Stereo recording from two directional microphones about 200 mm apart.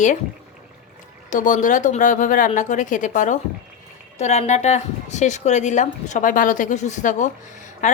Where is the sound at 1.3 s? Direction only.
40° left (ahead or behind).